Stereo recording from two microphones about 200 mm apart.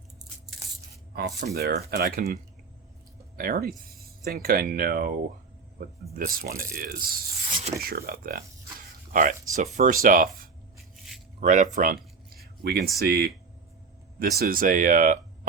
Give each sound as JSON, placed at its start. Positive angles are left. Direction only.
{"t": 1.1, "sound": "speech", "side_deg": -55}
{"t": 6.1, "sound": "speech", "side_deg": -45}
{"t": 10.9, "sound": "a sound", "side_deg": 0}
{"t": 11.3, "sound": "speech", "side_deg": -40}
{"t": 12.6, "sound": "speech", "side_deg": -50}